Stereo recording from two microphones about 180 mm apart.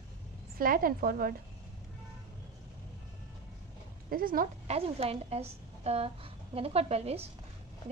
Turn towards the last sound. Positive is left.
turn(degrees=-35)  # may be behind; listen again after turning